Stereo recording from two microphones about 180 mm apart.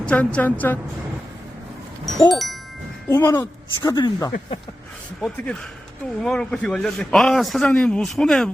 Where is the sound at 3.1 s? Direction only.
15° left (ahead or behind).